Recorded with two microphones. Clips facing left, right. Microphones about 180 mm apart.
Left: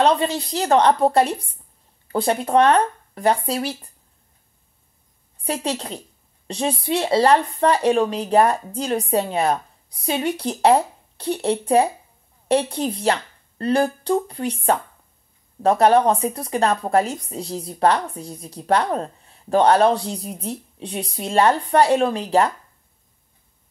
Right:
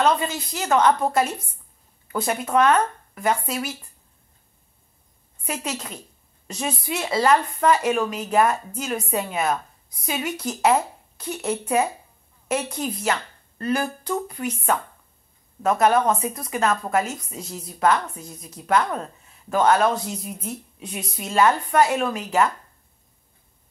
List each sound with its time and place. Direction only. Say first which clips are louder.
0.0 s speech: left 3 dB; 35° left (ahead or behind)
5.4 s speech: left 5 dB; 30° left (ahead or behind)